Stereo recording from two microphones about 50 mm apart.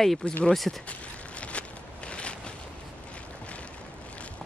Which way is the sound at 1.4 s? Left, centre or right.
Left.